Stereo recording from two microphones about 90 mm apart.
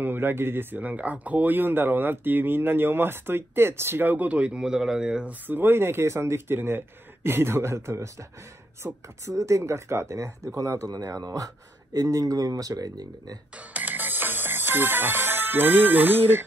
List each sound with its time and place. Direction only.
0.0 s speech: 25° right (ahead or behind); by 13.4 s 45° right (ahead or behind)
13.6 s music: 20° right (ahead or behind)